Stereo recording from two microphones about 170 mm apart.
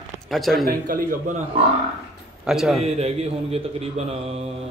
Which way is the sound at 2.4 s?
Centre (ahead or behind).